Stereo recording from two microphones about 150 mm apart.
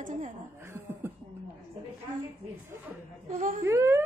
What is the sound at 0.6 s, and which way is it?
Chuckle, 15° right (ahead or behind).